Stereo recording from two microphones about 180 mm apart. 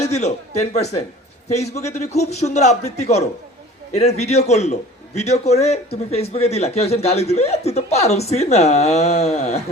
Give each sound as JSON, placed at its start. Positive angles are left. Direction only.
{"t": 0.0, "sound": "a man's voice", "side_deg": 35}